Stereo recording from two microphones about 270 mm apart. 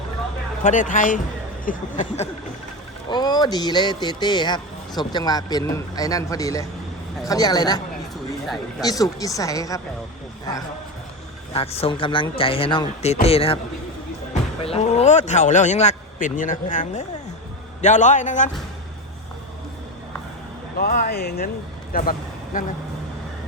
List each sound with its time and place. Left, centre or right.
0.6 s speech: left
3.1 s speech: centre
8.8 s speech: centre
11.5 s speech: left
14.6 s speech: left
20.7 s speech: left